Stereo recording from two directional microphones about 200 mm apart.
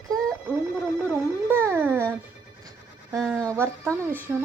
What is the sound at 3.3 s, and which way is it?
Speech, 15° right (ahead or behind).